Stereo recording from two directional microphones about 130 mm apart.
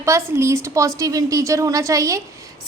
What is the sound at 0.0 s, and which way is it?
A woman's voice, 20° right (ahead or behind).